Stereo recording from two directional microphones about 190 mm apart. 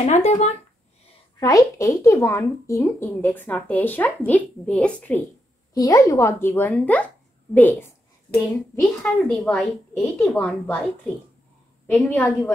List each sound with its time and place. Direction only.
0.0 s speech: 35° left (ahead or behind)
1.4 s a woman's voice: 15° left (ahead or behind)
11.9 s a woman's voice: 10° left (ahead or behind)